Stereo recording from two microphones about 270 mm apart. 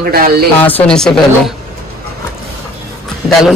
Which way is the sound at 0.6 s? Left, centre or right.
Centre.